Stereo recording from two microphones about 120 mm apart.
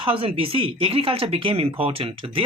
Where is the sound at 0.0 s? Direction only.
50° right (ahead or behind).